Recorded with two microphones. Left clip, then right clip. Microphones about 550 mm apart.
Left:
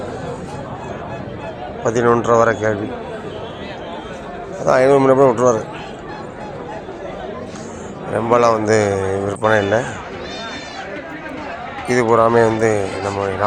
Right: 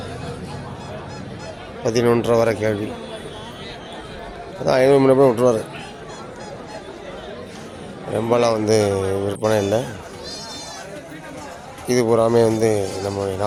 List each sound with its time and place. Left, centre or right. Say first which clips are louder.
1.9 s speech: left 3 dB; right
4.6 s speech: left 2 dB; right
8.1 s speech: left 4 dB; right
11.9 s speech: left 3 dB; right